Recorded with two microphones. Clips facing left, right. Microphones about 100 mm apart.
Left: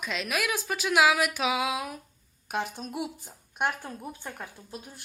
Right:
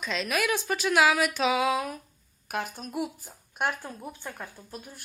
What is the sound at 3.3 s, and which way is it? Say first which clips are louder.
Speech: even; centre (ahead or behind).